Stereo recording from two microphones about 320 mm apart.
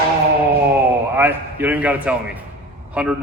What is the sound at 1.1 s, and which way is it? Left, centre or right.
A man's voice, centre.